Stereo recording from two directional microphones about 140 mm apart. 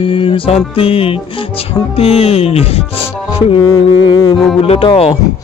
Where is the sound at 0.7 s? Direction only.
45° left (ahead or behind).